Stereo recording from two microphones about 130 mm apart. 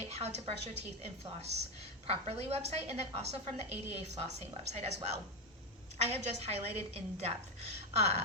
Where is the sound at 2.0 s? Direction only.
50° right (ahead or behind).